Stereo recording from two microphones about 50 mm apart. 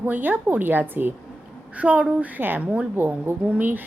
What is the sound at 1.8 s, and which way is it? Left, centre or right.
Speech, right.